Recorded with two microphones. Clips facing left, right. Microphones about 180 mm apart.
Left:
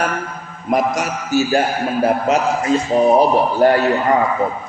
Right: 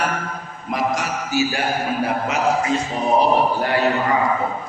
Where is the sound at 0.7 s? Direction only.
45° left (ahead or behind).